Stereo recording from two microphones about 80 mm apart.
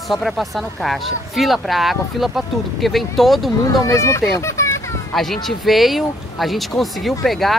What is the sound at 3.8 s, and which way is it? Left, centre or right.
Speech, left.